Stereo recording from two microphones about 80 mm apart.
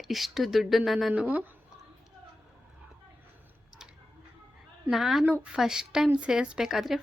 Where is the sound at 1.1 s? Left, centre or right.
Centre.